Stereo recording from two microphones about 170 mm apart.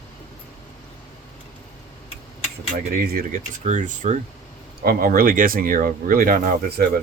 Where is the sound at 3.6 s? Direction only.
45° right (ahead or behind).